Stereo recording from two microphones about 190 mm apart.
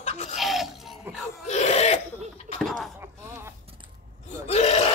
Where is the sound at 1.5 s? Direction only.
35° left (ahead or behind).